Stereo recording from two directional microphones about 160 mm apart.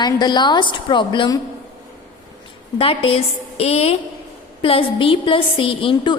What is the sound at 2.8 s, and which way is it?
A woman's voice, 35° left (ahead or behind).